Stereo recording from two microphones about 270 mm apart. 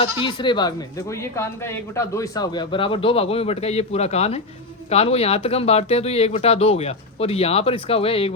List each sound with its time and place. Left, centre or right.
0.0 s a woman's voice: centre